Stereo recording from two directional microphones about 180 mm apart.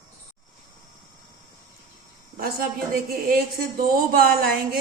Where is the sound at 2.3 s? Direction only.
55° right (ahead or behind).